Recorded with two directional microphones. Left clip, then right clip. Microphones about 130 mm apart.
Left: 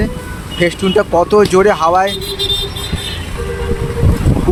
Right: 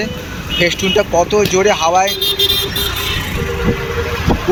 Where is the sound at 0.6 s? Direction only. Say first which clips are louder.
Left 1 dB; 45° left (ahead or behind).